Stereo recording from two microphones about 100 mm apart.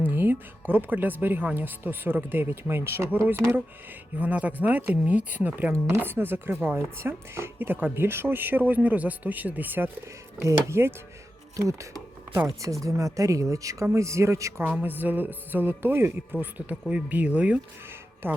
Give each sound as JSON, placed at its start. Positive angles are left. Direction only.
{"t": 0.0, "sound": "speech", "side_deg": -20}
{"t": 14.7, "sound": "speech", "side_deg": -15}